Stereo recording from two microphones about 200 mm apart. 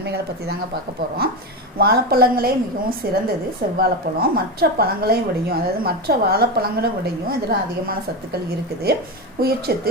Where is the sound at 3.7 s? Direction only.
50° right (ahead or behind).